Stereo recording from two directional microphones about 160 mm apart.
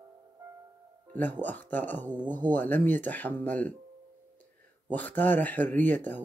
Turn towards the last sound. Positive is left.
turn(degrees=10)  # may be behind; listen again after turning